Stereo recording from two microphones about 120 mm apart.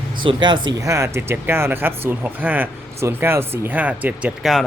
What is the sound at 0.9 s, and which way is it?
Speech, 25° right (ahead or behind).